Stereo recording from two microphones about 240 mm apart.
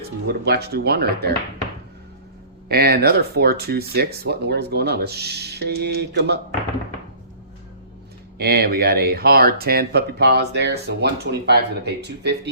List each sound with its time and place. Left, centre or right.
0.3 s speech: right
2.6 s speech: right
8.4 s speech: right